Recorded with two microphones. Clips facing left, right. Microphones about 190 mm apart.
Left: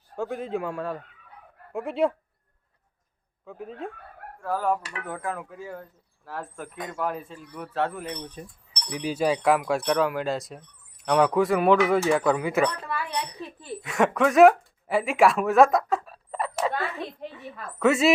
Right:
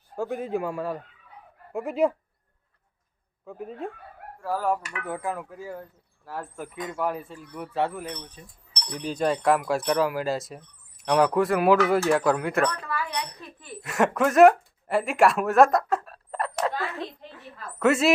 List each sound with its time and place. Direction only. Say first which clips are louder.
0.2 s speech: right 1 dB; 5° right (ahead or behind)
3.4 s speech: right 1 dB; 5° right (ahead or behind)
8.9 s speech: left 1 dB; 5° left (ahead or behind)
12.9 s speech: even; 25° left (ahead or behind)
13.8 s speech: left 1 dB; centre (ahead or behind)